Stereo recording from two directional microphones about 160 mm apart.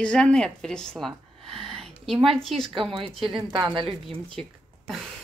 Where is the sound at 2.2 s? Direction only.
5° left (ahead or behind).